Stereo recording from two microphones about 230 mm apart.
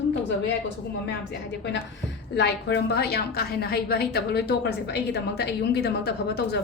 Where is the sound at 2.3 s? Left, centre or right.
Left.